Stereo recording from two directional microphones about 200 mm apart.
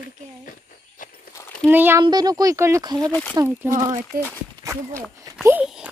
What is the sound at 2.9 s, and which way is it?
Speech, 5° left (ahead or behind).